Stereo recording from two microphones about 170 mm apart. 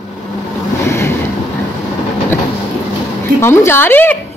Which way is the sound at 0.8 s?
15° left (ahead or behind).